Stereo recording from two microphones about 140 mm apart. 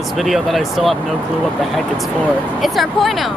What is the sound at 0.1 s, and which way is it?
Speech, centre (ahead or behind).